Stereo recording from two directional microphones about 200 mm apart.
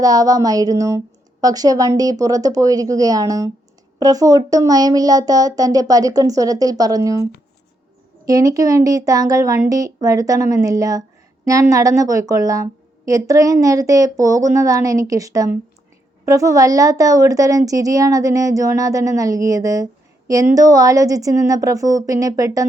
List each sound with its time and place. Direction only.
0.0 s speech: 20° right (ahead or behind)
8.3 s speech: 15° right (ahead or behind)